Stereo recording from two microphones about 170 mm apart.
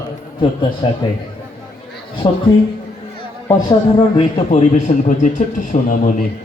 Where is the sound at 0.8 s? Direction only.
30° left (ahead or behind).